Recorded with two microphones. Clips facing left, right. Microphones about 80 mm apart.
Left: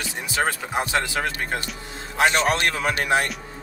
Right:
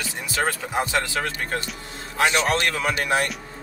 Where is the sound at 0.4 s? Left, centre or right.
Centre.